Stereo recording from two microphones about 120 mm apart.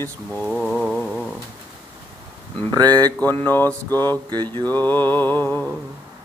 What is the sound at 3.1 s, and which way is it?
Mantra, 15° left (ahead or behind).